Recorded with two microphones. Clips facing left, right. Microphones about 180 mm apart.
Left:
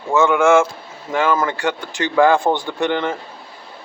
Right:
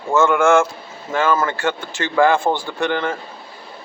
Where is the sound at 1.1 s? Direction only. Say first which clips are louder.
Even; 15° left (ahead or behind).